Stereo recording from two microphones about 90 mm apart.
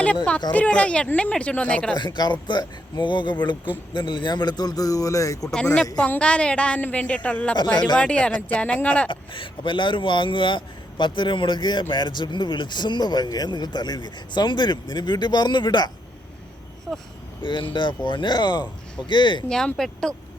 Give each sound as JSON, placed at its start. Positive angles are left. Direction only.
{"t": 0.5, "sound": "a woman's voice", "side_deg": 15}
{"t": 2.0, "sound": "a man's voice", "side_deg": 50}
{"t": 6.0, "sound": "a woman's voice", "side_deg": 15}
{"t": 9.0, "sound": "speech", "side_deg": 70}
{"t": 16.9, "sound": "speech", "side_deg": 0}
{"t": 17.4, "sound": "speech", "side_deg": 65}
{"t": 19.5, "sound": "a woman's voice", "side_deg": 5}